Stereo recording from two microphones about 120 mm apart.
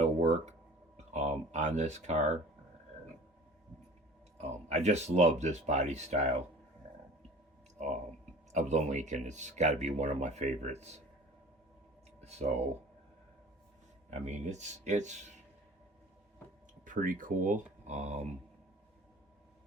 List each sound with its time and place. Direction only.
0.0 s a sound: 70° right (ahead or behind)
0.9 s speech: 70° right (ahead or behind)
4.4 s speech: 65° right (ahead or behind)
8.5 s speech: 80° right
12.2 s speech: 65° right (ahead or behind)
14.1 s speech: 75° right (ahead or behind)
16.8 s speech: 90° right